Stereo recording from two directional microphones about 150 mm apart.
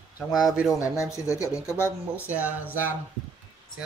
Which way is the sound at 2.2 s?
10° right (ahead or behind).